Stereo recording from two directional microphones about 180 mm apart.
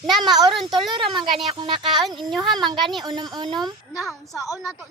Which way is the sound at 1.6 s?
25° right (ahead or behind).